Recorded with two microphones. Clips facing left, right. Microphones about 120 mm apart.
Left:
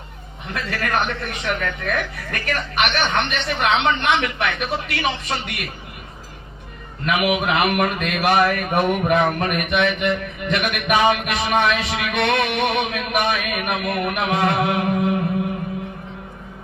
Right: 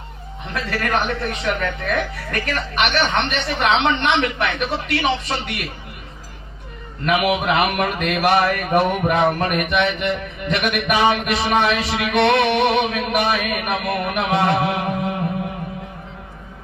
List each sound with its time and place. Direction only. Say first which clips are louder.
0.5 s a man's voice: right 1 dB; 40° right (ahead or behind)
7.0 s a man's voice: right 1 dB; 40° right (ahead or behind)